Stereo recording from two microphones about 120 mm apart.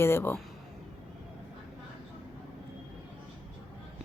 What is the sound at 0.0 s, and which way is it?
Speech, 20° left (ahead or behind).